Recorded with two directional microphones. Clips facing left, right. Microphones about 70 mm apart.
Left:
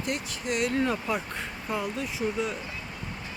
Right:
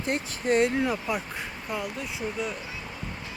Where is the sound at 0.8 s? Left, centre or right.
Centre.